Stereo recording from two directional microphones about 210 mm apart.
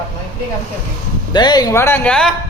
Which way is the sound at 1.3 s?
20° left (ahead or behind).